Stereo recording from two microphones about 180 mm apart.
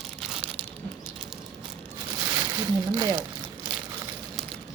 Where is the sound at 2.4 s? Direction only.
20° right (ahead or behind).